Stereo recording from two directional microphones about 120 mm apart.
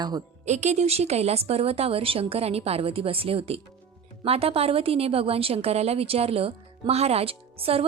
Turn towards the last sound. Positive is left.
turn(degrees=-55)  # may be behind; listen again after turning